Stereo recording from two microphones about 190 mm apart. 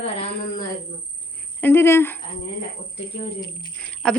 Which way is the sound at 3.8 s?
5° left (ahead or behind).